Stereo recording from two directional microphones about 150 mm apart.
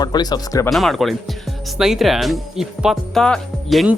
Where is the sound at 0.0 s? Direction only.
25° left (ahead or behind).